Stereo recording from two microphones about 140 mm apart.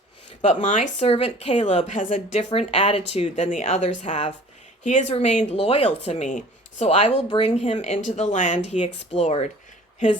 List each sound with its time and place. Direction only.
0.4 s a woman's voice: 60° left (ahead or behind)
4.8 s a woman's voice: 60° left (ahead or behind)